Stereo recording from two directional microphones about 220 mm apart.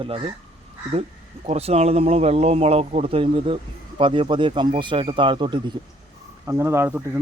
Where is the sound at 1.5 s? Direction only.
30° right (ahead or behind).